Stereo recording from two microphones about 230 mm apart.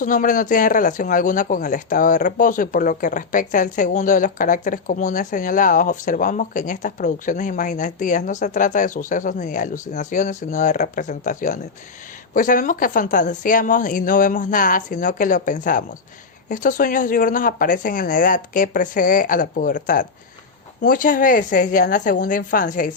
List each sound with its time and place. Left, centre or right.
0.0 s speech: left